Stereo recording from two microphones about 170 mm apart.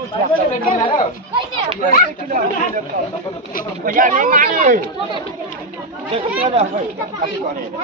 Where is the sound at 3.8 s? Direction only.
55° right (ahead or behind).